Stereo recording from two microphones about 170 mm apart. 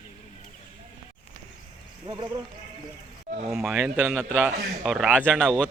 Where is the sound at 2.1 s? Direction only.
25° right (ahead or behind).